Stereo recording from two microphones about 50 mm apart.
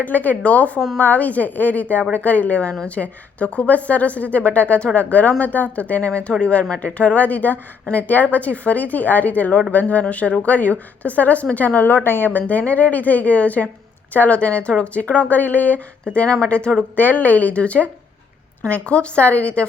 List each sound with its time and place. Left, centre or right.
0.0 s a woman's voice: left
16.1 s a woman's voice: left
16.9 s a woman's voice: left